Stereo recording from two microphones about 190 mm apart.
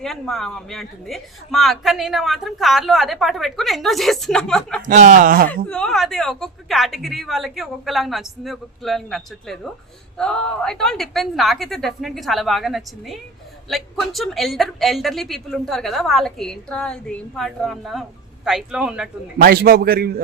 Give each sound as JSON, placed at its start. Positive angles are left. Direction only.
{"t": 0.0, "sound": "a woman's voice", "side_deg": 0}
{"t": 4.9, "sound": "a man's voice", "side_deg": -45}
{"t": 5.5, "sound": "a woman's voice", "side_deg": 5}
{"t": 19.4, "sound": "a man's voice", "side_deg": -50}